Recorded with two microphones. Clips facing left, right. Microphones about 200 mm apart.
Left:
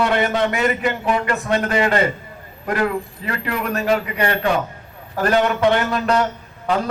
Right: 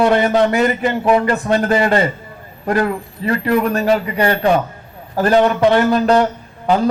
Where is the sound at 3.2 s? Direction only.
35° right (ahead or behind).